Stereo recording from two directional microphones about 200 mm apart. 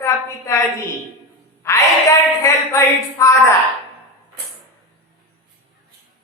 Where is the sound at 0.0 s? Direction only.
15° left (ahead or behind).